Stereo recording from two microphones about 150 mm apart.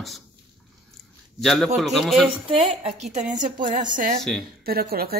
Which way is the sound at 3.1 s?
55° right (ahead or behind).